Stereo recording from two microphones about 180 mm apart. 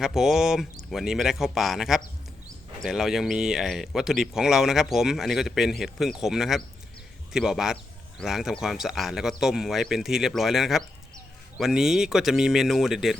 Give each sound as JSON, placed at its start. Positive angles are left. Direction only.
{"t": 0.0, "sound": "speech", "side_deg": 0}